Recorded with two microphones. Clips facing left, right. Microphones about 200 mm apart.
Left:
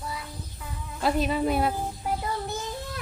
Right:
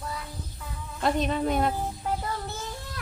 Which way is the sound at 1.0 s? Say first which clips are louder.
Left 1 dB; 5° left (ahead or behind).